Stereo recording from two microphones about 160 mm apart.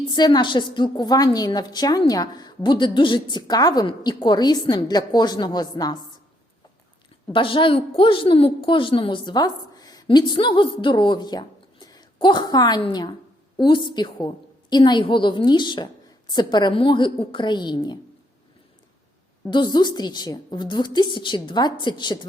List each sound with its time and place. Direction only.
0.1 s a woman's voice: 25° left (ahead or behind)
7.3 s a woman's voice: 30° left (ahead or behind)
19.5 s a woman's voice: 30° left (ahead or behind)